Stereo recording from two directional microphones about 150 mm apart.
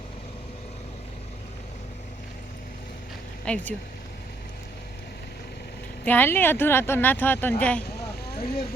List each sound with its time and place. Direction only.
3.4 s speech: 10° left (ahead or behind)
6.1 s speech: 10° left (ahead or behind)
7.9 s vehicle: 90° left